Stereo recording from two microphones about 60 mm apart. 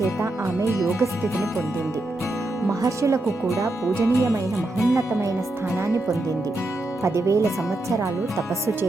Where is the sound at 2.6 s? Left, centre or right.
Right.